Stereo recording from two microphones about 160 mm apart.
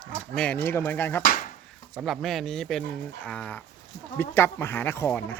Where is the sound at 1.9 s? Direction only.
Centre (ahead or behind).